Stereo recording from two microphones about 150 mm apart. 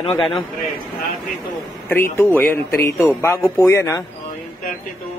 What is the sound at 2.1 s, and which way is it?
Speech, 15° left (ahead or behind).